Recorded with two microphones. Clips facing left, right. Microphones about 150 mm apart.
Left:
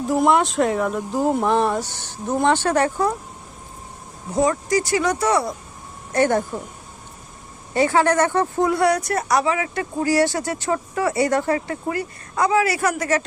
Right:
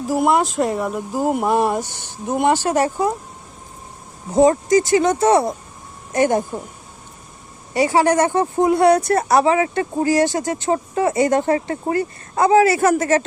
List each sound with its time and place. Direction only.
0.1 s speech: 5° right (ahead or behind)
4.4 s speech: 25° right (ahead or behind)
7.7 s speech: 15° right (ahead or behind)